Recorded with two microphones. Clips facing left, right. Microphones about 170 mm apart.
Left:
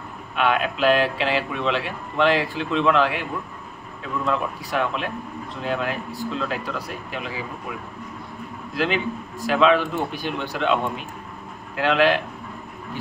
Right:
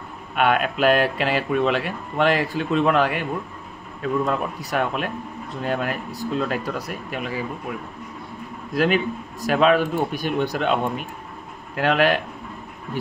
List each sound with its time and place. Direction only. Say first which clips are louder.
0.4 s speech: right 2 dB; 50° right (ahead or behind)
8.7 s speech: right 3 dB; 50° right (ahead or behind)